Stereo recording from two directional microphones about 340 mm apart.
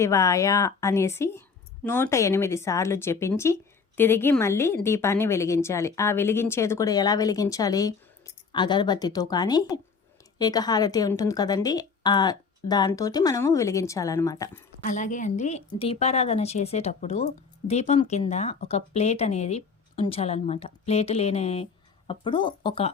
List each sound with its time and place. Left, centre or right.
0.0 s a woman's voice: centre
14.8 s a woman's voice: left